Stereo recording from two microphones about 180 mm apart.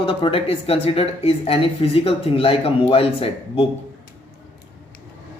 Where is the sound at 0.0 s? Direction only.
30° left (ahead or behind).